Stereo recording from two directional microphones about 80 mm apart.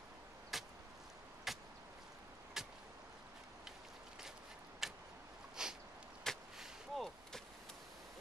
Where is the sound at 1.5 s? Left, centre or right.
Centre.